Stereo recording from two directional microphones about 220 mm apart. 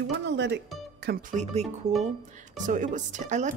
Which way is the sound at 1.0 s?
50° right (ahead or behind).